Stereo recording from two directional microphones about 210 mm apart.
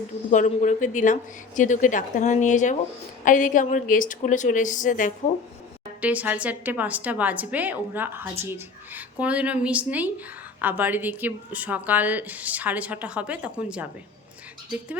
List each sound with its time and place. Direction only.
0.3 s speech: 35° left (ahead or behind)
6.0 s speech: 5° right (ahead or behind)